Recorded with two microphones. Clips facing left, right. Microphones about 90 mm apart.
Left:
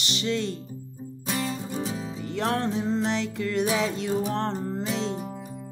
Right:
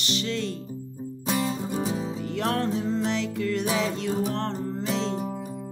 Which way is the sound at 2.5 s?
25° left (ahead or behind).